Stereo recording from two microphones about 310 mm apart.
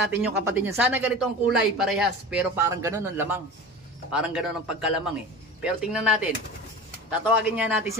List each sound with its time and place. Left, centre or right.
0.1 s speech: centre